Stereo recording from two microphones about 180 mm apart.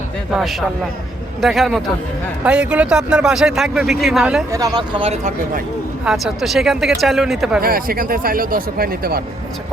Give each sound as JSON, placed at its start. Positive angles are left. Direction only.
{"t": 1.4, "sound": "speech", "side_deg": 0}
{"t": 4.5, "sound": "speech", "side_deg": -20}
{"t": 6.1, "sound": "speech", "side_deg": 0}
{"t": 7.6, "sound": "speech", "side_deg": -55}